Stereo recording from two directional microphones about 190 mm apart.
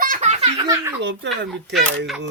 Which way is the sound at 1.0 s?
70° right (ahead or behind).